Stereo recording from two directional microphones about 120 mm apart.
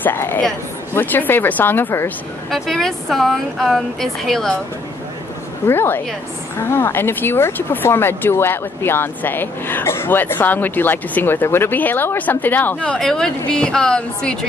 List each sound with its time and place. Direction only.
0.0 s speech: 15° left (ahead or behind)
2.5 s speech: centre (ahead or behind)
5.7 s speech: 15° left (ahead or behind)